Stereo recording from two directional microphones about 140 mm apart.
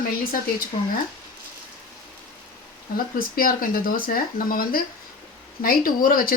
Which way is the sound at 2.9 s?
90° left.